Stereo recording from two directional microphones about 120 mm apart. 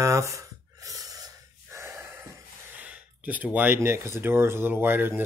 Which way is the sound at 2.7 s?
10° right (ahead or behind).